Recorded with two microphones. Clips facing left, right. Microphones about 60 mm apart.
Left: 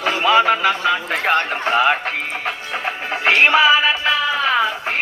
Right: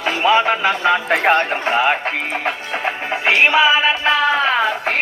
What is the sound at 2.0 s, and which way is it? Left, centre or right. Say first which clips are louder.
Speech: right 2 dB; right.